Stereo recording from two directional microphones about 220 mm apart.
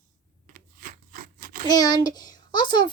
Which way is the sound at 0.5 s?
40° right (ahead or behind).